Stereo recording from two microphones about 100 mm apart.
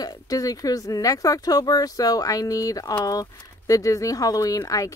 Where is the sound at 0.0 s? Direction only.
40° left (ahead or behind).